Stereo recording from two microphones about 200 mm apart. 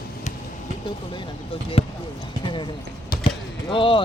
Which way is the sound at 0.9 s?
25° left (ahead or behind).